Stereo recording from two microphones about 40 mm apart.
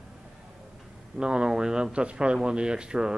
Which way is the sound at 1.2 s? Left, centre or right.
Right.